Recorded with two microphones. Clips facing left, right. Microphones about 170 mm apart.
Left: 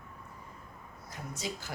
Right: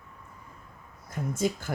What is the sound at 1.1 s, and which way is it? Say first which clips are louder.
Speech: right 11 dB; 50° right (ahead or behind).